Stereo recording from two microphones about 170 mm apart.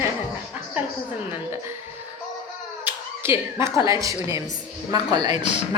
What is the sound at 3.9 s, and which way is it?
A woman's voice, 20° right (ahead or behind).